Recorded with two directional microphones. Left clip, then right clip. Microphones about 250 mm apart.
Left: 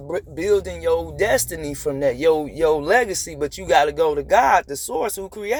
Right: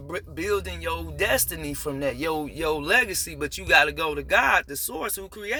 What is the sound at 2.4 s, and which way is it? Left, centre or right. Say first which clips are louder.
Speech: left 8 dB; right.